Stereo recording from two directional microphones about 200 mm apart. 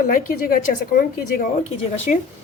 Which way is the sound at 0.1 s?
45° left (ahead or behind).